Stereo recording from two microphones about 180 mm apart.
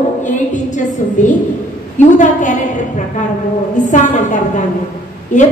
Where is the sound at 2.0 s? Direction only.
45° left (ahead or behind).